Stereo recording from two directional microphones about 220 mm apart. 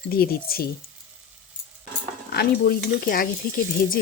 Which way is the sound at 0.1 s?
40° left (ahead or behind).